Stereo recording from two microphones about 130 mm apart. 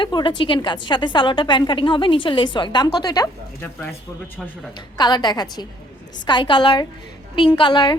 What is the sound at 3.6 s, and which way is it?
Speech, 15° left (ahead or behind).